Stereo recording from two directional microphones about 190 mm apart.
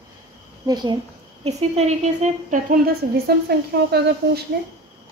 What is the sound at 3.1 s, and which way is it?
A woman's voice, 55° right (ahead or behind).